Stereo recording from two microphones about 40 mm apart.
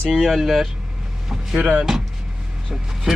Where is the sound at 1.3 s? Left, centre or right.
Centre.